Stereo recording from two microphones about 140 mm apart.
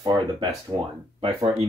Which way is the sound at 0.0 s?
30° right (ahead or behind).